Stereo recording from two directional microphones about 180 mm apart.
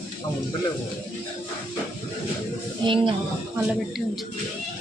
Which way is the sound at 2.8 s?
25° right (ahead or behind).